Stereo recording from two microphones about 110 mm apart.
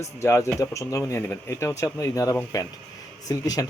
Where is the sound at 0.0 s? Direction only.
25° left (ahead or behind).